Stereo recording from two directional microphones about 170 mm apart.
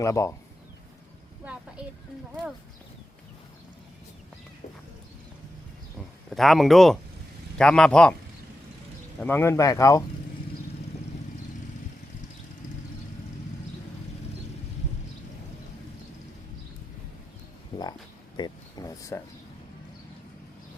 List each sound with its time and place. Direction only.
0.0 s speech: 20° left (ahead or behind)
6.3 s a man's voice: centre (ahead or behind)
9.1 s speech: 10° left (ahead or behind)
17.7 s a sound: 35° left (ahead or behind)
18.3 s speech: 25° left (ahead or behind)